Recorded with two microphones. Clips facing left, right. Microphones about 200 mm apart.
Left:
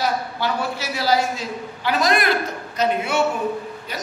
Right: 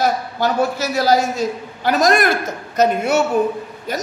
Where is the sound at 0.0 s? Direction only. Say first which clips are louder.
Right 5 dB; 45° right (ahead or behind).